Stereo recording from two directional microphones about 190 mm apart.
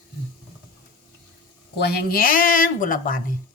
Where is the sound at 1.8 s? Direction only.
55° left (ahead or behind).